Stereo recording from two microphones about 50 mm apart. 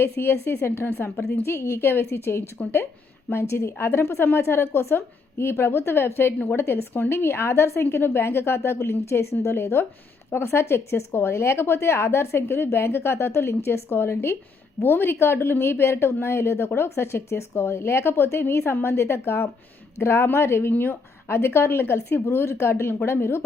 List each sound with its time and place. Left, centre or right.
0.0 s a woman's voice: left
2.6 s speech: left
3.5 s a woman's voice: left